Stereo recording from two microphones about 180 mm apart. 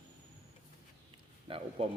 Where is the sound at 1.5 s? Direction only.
30° right (ahead or behind).